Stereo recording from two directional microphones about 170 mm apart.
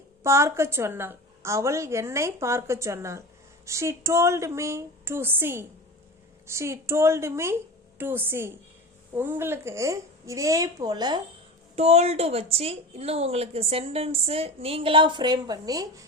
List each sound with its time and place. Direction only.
0.2 s a woman's voice: 15° right (ahead or behind)
11.8 s speech: 35° right (ahead or behind); by 16.0 s 20° right (ahead or behind)